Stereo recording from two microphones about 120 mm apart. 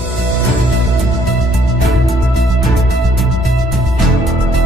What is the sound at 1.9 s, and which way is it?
Music, centre (ahead or behind).